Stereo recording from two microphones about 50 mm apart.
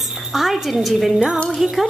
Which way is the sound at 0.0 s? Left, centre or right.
Centre.